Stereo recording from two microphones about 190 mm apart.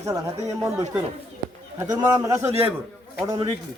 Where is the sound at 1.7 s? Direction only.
20° right (ahead or behind).